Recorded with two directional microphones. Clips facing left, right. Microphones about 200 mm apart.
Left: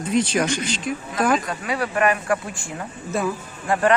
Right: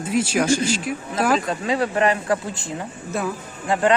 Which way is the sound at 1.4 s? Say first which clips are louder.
Right 4 dB; 25° right (ahead or behind).